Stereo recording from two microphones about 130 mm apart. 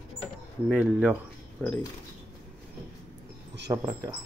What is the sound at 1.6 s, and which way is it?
Speech, 15° left (ahead or behind).